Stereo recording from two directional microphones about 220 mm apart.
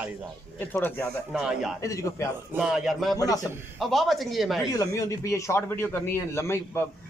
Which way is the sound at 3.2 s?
15° left (ahead or behind).